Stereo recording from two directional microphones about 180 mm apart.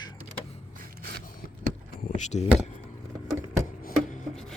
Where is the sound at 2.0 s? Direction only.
40° left (ahead or behind).